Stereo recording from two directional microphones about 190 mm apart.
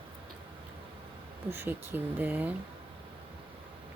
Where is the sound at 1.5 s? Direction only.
10° right (ahead or behind).